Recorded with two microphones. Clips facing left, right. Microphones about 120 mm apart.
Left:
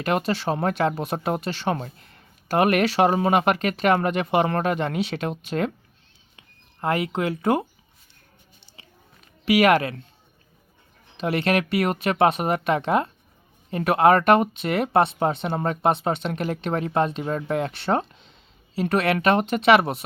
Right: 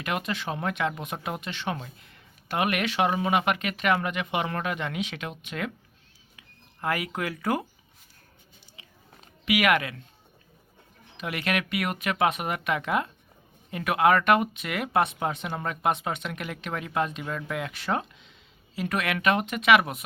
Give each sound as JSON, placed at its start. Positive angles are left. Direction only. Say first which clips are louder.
{"t": 0.0, "sound": "speech", "louder": "left 7 dB", "side_deg": 35}
{"t": 6.8, "sound": "speech", "louder": "left 6 dB", "side_deg": 25}
{"t": 9.5, "sound": "speech", "louder": "left 6 dB", "side_deg": 30}
{"t": 11.2, "sound": "speech", "louder": "left 7 dB", "side_deg": 30}